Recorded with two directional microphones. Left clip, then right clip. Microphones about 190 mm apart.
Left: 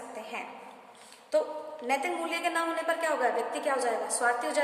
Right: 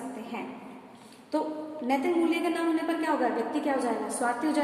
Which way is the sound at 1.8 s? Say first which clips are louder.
Right 4 dB; 45° left (ahead or behind).